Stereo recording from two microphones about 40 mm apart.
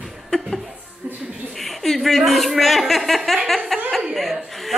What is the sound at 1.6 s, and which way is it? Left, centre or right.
A woman's voice, centre.